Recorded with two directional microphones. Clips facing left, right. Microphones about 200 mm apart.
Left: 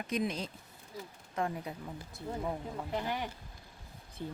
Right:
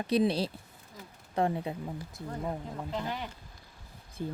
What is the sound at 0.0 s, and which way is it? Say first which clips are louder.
Speech: right 7 dB; 30° right (ahead or behind).